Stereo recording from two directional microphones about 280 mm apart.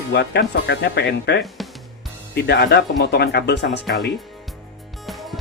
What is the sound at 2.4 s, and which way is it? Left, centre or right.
Speech, left.